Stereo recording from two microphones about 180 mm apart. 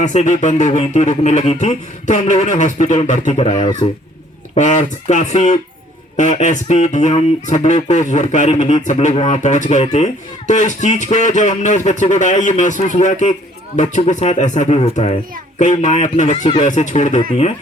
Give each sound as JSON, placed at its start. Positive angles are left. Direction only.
{"t": 0.0, "sound": "speech", "side_deg": 40}
{"t": 4.5, "sound": "speech", "side_deg": 40}